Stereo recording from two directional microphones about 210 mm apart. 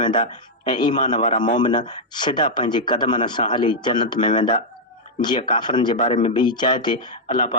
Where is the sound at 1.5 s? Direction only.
20° left (ahead or behind).